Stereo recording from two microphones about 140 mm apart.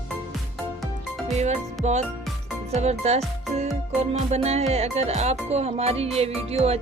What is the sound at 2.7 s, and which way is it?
Music, 50° right (ahead or behind).